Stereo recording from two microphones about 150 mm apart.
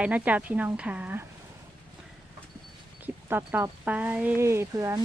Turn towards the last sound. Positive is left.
turn(degrees=-20)  # may be behind; listen again after turning